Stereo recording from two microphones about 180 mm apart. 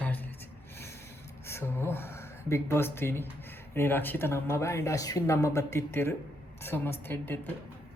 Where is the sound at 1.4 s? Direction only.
15° left (ahead or behind).